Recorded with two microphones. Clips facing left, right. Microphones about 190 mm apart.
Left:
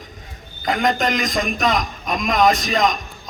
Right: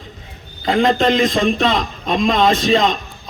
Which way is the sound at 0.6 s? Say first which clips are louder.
Right 5 dB; 30° right (ahead or behind).